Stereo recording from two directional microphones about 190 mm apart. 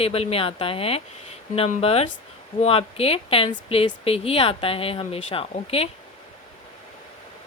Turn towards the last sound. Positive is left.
turn(degrees=30)  # may be behind; listen again after turning